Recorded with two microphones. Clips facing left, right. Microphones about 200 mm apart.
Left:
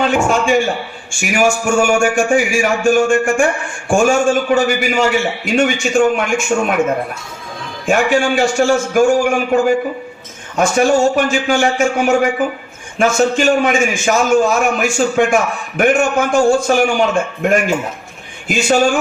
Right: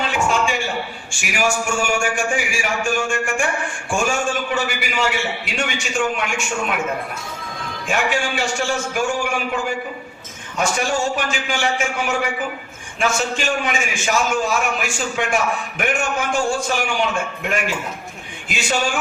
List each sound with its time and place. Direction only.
0.0 s a man's voice: 45° left (ahead or behind)
7.9 s a man's voice: 45° left (ahead or behind)